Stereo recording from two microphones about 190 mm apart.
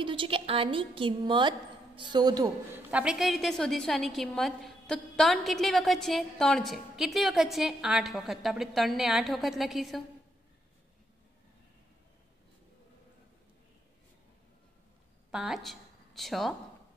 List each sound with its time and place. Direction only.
0.0 s a woman's voice: 25° right (ahead or behind)
2.9 s a woman's voice: 5° right (ahead or behind)
15.3 s a woman's voice: centre (ahead or behind)